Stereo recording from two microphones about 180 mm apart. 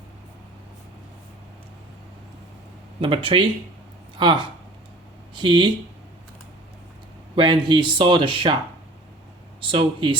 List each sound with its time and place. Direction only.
3.0 s speech: 30° right (ahead or behind)
7.3 s speech: 25° right (ahead or behind)
9.6 s speech: 30° right (ahead or behind)